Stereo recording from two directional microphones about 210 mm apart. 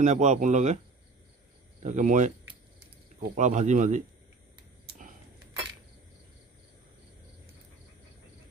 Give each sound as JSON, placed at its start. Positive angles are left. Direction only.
{"t": 0.0, "sound": "speech", "side_deg": -35}
{"t": 1.9, "sound": "speech", "side_deg": -35}
{"t": 3.3, "sound": "speech", "side_deg": -35}